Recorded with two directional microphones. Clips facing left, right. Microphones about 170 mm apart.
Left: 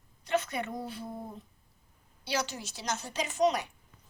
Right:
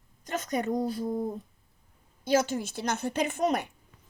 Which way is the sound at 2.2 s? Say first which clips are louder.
Right 9 dB; 50° right (ahead or behind).